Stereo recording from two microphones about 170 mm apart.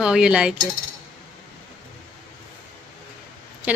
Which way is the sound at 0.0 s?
5° right (ahead or behind).